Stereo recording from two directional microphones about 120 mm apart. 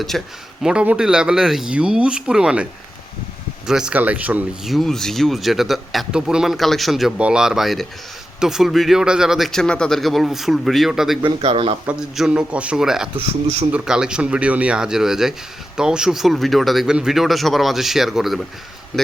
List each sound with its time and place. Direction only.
0.1 s speech: centre (ahead or behind)
3.7 s speech: 5° right (ahead or behind)
4.6 s speech: centre (ahead or behind)
11.2 s speech: 45° right (ahead or behind)
11.9 s speech: 5° right (ahead or behind)
13.1 s speech: 55° right (ahead or behind)
13.7 s speech: 5° right (ahead or behind)